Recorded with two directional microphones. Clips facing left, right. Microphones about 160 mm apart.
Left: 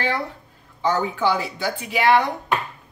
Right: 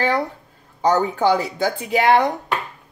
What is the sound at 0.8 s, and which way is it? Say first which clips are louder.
Speech: right 4 dB; 40° right (ahead or behind).